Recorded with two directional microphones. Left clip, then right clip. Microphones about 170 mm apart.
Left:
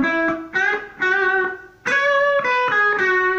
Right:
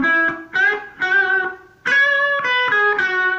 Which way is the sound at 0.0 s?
55° right (ahead or behind).